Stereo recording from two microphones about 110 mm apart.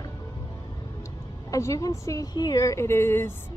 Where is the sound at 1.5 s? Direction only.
30° left (ahead or behind).